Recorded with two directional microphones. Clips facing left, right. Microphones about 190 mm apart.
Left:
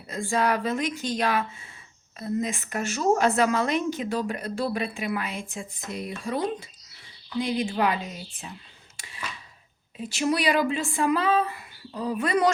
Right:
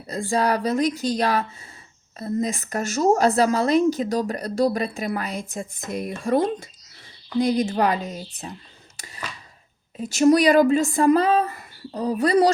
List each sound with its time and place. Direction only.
0.1 s a woman's voice: 35° right (ahead or behind)
9.0 s a sound: 40° right (ahead or behind)
10.0 s speech: 45° right (ahead or behind)